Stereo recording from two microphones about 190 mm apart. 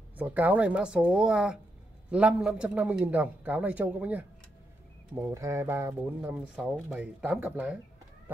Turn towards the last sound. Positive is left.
turn(degrees=-5)  # may be behind; listen again after turning